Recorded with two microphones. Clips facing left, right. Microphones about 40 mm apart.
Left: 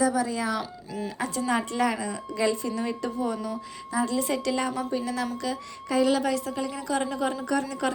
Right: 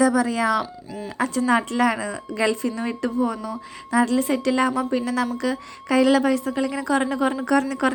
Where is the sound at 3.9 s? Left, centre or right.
Right.